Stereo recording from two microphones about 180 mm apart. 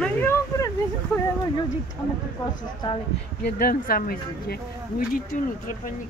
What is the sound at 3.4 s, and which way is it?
Speech, 55° left (ahead or behind).